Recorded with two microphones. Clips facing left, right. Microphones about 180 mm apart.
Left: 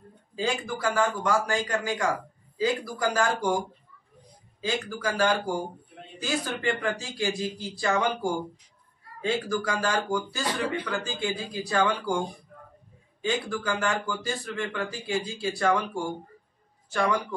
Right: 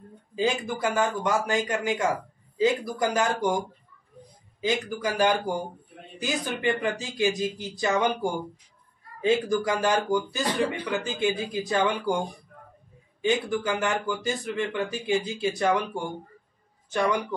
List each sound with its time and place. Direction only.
0.4 s speech: 20° right (ahead or behind)
4.6 s speech: 20° right (ahead or behind)
13.2 s speech: 20° right (ahead or behind)